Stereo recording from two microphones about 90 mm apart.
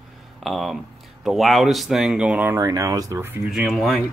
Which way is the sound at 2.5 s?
35° right (ahead or behind).